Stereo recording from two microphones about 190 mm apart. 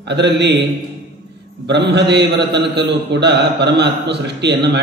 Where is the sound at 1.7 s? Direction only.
60° right (ahead or behind).